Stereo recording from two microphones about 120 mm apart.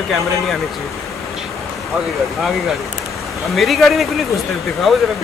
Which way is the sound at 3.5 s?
Centre (ahead or behind).